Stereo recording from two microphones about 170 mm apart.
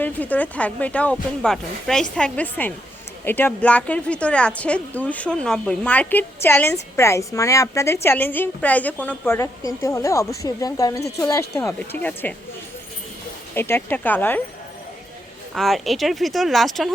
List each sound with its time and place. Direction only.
0.0 s a woman's voice: 10° left (ahead or behind)
13.5 s a woman's voice: 10° left (ahead or behind)
15.5 s speech: centre (ahead or behind)